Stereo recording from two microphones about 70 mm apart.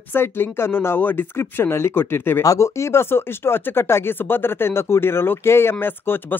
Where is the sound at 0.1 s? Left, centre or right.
Left.